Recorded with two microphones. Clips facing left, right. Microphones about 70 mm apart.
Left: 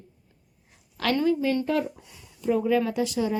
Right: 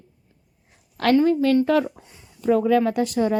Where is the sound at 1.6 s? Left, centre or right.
Right.